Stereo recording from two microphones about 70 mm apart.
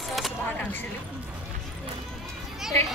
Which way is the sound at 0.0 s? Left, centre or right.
Centre.